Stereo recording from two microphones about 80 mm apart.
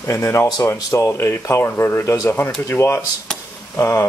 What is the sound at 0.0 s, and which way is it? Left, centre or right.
Speech, left.